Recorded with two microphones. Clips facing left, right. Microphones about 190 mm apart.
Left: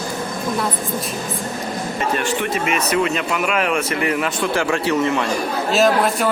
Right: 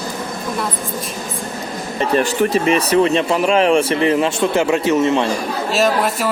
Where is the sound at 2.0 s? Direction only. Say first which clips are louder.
Right 7 dB; 35° right (ahead or behind).